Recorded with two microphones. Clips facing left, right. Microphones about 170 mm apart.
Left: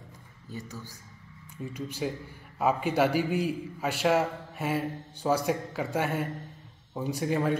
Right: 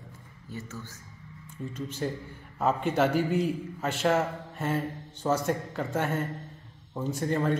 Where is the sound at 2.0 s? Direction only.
5° left (ahead or behind).